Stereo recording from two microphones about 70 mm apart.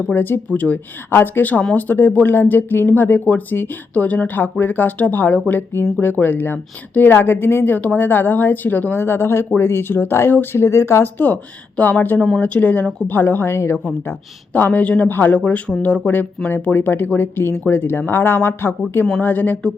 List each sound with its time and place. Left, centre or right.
0.1 s speech: left
11.8 s speech: left
14.1 s speech: left